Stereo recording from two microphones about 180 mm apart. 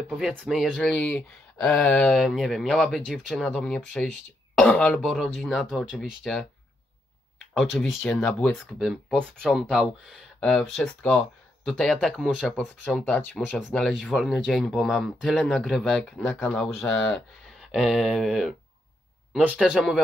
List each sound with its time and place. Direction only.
0.2 s speech: 5° right (ahead or behind)
7.5 s speech: centre (ahead or behind)